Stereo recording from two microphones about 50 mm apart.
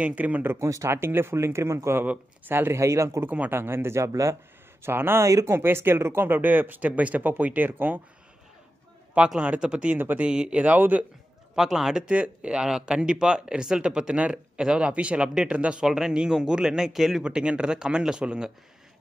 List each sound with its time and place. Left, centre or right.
0.0 s speech: right
0.6 s speech: right
2.7 s speech: right
3.3 s speech: right
3.5 s speech: right
4.8 s speech: right
9.2 s a man's voice: right
10.6 s a man's voice: right
11.5 s speech: centre
12.1 s speech: right
14.6 s speech: centre
14.9 s a man's voice: right
15.8 s speech: centre
17.2 s a man's voice: centre